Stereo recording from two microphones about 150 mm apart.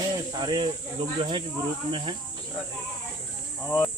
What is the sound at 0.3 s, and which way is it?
Speech, 30° right (ahead or behind).